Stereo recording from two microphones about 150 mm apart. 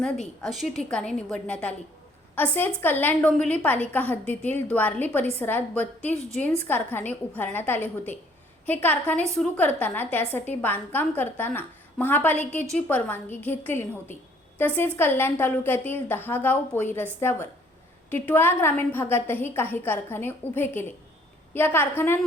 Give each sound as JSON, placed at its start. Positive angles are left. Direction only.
{"t": 0.0, "sound": "a woman's voice", "side_deg": 0}